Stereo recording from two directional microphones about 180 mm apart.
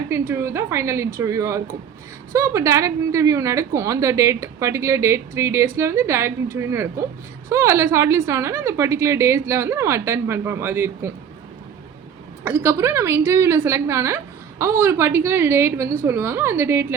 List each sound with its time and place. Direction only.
0.1 s a woman's voice: 15° right (ahead or behind)
12.5 s a woman's voice: 15° right (ahead or behind)